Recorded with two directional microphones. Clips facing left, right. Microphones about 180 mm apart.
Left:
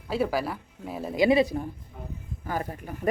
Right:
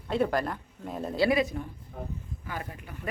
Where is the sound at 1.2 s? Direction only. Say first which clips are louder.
Left 4 dB; 25° left (ahead or behind); by 3.1 s 40° left (ahead or behind).